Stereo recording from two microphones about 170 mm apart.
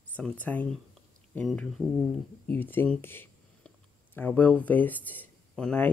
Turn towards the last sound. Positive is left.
turn(degrees=10)  # may be behind; listen again after turning